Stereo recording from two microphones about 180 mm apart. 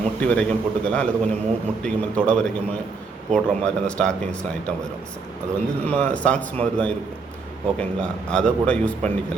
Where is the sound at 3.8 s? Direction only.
5° left (ahead or behind).